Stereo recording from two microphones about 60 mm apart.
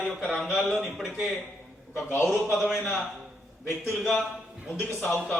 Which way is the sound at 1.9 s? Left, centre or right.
Left.